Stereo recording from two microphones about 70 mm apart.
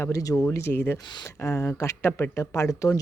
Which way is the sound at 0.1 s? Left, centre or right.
Left.